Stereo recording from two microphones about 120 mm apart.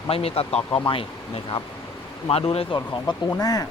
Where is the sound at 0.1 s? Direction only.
55° left (ahead or behind).